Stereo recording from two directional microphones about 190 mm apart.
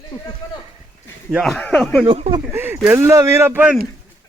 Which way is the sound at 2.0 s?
35° right (ahead or behind).